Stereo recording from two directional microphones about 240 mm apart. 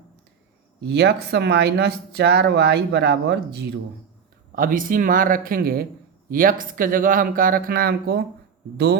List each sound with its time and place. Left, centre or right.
0.8 s speech: right